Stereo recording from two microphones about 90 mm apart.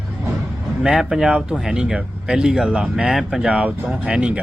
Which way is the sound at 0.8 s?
5° right (ahead or behind).